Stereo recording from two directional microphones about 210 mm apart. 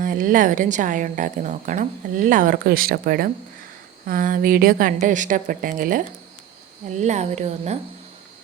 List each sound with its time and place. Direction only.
0.0 s a woman's voice: 40° right (ahead or behind)
7.0 s a woman's voice: 35° right (ahead or behind)